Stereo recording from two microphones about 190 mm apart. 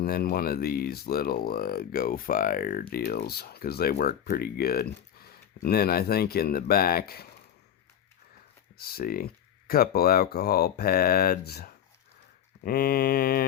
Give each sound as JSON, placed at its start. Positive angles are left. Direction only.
{"t": 0.0, "sound": "speech", "side_deg": 55}
{"t": 8.8, "sound": "speech", "side_deg": 50}